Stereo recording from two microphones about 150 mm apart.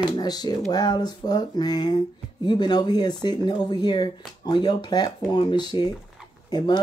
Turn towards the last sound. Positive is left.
turn(degrees=25)  # may be behind; listen again after turning